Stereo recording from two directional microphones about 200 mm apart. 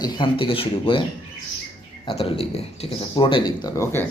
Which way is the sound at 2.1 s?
25° left (ahead or behind).